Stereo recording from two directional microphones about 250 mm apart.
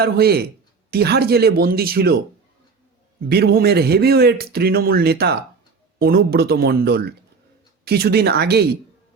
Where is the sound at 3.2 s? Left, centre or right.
Right.